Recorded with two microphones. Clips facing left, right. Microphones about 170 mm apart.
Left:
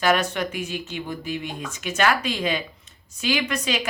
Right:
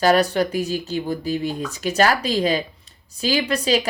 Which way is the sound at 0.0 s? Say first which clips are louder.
Right 5 dB; 35° right (ahead or behind).